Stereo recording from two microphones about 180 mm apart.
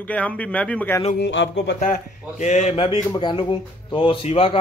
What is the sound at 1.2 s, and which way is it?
Speech, 90° left.